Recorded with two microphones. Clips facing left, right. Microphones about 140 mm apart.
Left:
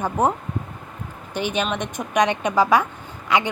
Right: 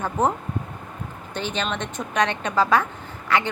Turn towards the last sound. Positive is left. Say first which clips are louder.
# left 2 dB
turn(degrees=15)  # may be behind; listen again after turning